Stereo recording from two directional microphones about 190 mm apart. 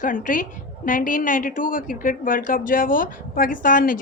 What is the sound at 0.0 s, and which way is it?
A woman's voice, 45° left (ahead or behind).